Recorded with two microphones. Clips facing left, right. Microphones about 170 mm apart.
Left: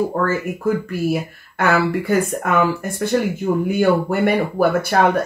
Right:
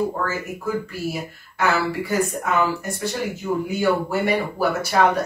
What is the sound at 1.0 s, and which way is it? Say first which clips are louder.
Speech: left 7 dB; 55° left (ahead or behind).